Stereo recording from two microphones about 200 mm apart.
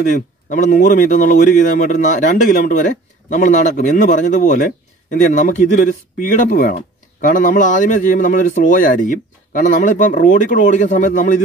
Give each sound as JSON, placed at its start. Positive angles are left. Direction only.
{"t": 0.5, "sound": "speech", "side_deg": 40}